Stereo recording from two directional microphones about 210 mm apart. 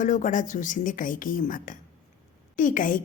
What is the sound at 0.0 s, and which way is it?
Speech, 35° left (ahead or behind).